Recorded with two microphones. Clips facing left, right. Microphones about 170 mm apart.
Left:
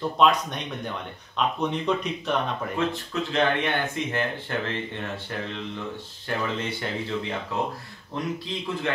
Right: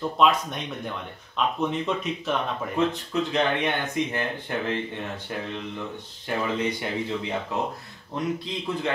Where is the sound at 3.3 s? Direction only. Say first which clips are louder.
Left 3 dB; 15° right (ahead or behind).